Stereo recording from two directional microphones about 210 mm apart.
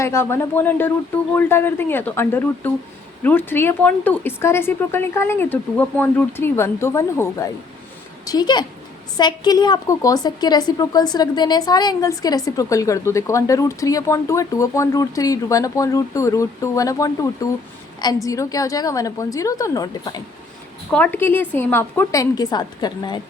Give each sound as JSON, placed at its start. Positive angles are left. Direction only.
{"t": 0.0, "sound": "a woman's voice", "side_deg": 10}